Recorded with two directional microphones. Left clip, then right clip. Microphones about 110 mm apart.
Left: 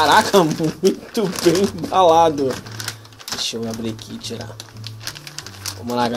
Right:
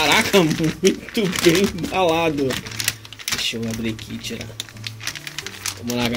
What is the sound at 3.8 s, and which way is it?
Speech, 15° left (ahead or behind).